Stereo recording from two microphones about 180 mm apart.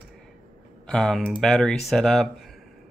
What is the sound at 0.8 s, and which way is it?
Speech, centre (ahead or behind).